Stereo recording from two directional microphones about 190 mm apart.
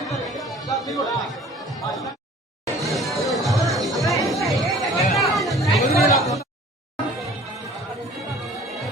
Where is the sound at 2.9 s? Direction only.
Centre (ahead or behind).